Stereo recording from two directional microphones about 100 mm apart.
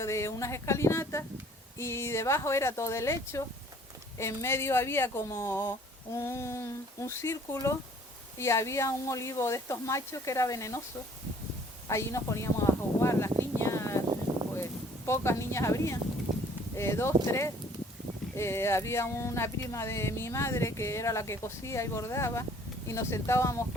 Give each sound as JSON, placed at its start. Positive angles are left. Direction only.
{"t": 0.0, "sound": "speech", "side_deg": 30}
{"t": 11.9, "sound": "a sound", "side_deg": 30}
{"t": 14.5, "sound": "speech", "side_deg": 25}
{"t": 18.3, "sound": "speech", "side_deg": 25}